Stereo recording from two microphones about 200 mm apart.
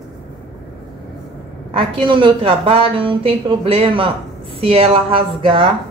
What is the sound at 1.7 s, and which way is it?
A woman's voice, 25° right (ahead or behind).